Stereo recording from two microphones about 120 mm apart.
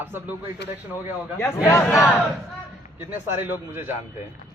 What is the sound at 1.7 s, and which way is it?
Speech, 25° left (ahead or behind).